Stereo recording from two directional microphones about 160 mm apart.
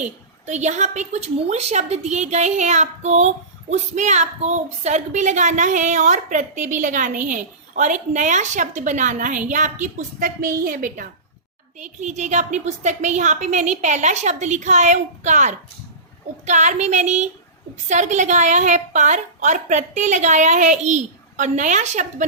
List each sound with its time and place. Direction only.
0.0 s a woman's voice: 45° right (ahead or behind)